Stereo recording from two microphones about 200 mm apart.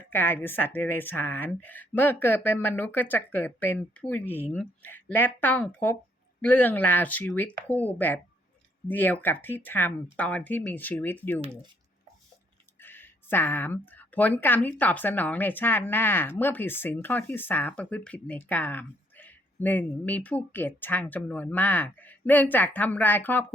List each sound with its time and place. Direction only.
0.1 s a woman's voice: 10° left (ahead or behind)
11.3 s speech: 30° right (ahead or behind)
12.8 s a woman's voice: 10° left (ahead or behind)